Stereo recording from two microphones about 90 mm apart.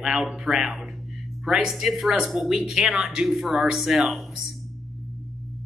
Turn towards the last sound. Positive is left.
turn(degrees=0)  # may be behind; listen again after turning